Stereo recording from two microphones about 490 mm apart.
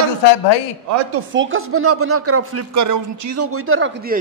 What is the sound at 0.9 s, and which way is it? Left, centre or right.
Speech, right.